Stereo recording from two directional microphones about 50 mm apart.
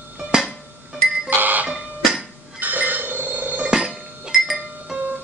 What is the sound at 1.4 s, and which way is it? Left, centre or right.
Music, right.